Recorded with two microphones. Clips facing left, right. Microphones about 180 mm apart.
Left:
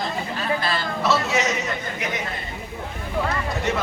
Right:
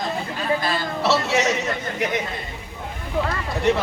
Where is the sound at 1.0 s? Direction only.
35° right (ahead or behind).